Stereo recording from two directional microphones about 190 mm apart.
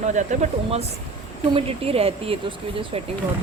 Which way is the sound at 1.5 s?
30° right (ahead or behind).